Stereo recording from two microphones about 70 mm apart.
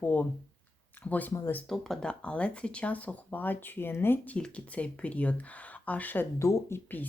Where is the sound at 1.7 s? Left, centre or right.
Centre; by 4.2 s left.